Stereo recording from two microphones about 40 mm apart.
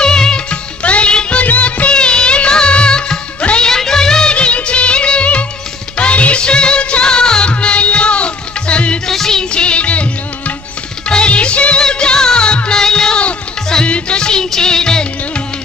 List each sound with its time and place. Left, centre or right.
0.0 s music: centre
0.5 s music: left
1.4 s music of bollywood: left
1.9 s music of bollywood: left
3.6 s music of bollywood: centre
4.4 s music of bollywood: left
5.9 s music: left
9.0 s music: centre
9.5 s music: left
13.8 s music: left